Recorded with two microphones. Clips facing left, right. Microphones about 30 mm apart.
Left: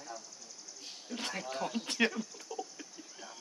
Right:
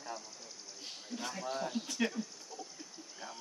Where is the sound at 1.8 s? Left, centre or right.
Left.